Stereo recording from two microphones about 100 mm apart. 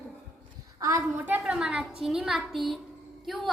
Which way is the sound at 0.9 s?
30° right (ahead or behind).